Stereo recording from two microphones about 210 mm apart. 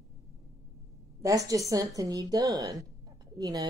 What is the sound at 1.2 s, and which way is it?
Speech, 15° right (ahead or behind).